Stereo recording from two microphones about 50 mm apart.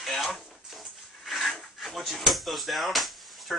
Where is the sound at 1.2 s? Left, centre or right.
Centre.